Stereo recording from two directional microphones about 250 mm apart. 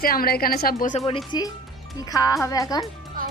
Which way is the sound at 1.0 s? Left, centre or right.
Centre.